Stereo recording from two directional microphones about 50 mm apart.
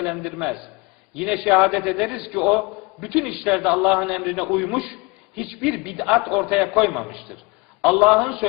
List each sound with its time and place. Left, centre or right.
0.0 s a man's voice: centre
7.9 s a man's voice: right